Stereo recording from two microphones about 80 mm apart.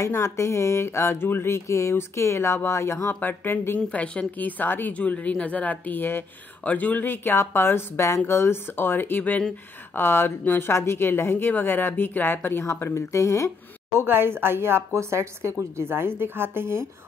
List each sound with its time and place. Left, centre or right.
0.0 s a sound: left
3.2 s a woman's voice: left
13.9 s speech: right